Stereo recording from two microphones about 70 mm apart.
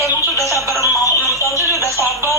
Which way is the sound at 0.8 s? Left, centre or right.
Left.